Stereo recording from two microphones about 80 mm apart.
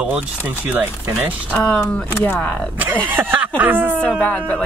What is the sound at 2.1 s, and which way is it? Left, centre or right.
Speech, left.